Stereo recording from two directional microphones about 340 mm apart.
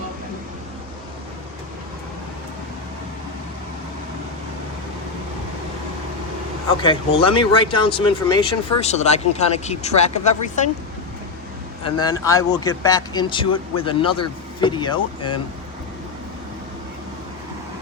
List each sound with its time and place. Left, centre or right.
6.8 s speech: centre
11.8 s speech: centre